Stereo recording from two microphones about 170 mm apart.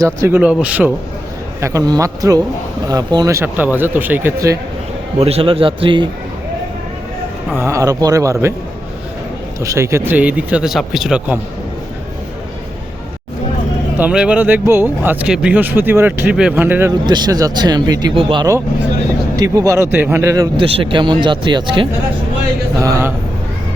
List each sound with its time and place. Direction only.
0.0 s speech: 15° right (ahead or behind)
5.2 s a man's voice: 35° right (ahead or behind)
7.5 s speech: 15° right (ahead or behind)
9.6 s speech: 15° right (ahead or behind)
14.0 s speech: 5° right (ahead or behind)
17.1 s speech: 25° right (ahead or behind)
19.4 s speech: 20° right (ahead or behind)
20.7 s speech: 30° right (ahead or behind)
22.8 s speech: 15° right (ahead or behind)